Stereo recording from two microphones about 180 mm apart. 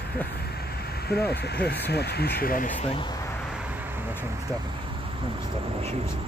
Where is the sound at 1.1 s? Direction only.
60° left (ahead or behind).